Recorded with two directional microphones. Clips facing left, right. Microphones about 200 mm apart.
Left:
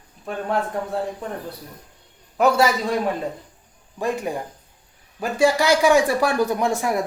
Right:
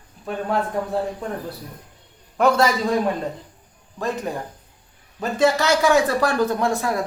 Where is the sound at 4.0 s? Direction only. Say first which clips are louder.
Left 1 dB; 15° left (ahead or behind).